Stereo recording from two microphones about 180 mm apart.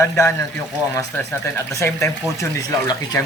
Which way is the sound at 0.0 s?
15° left (ahead or behind).